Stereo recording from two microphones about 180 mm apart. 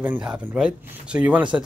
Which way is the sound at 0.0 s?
5° right (ahead or behind).